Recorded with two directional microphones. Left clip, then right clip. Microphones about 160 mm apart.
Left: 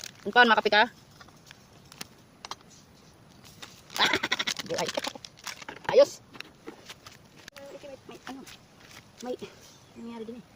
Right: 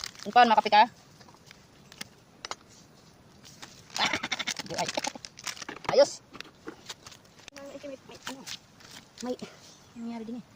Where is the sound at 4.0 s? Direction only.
75° left (ahead or behind).